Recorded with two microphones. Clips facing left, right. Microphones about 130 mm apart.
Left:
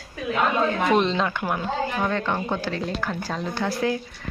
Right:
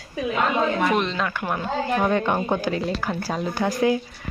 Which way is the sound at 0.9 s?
30° left (ahead or behind).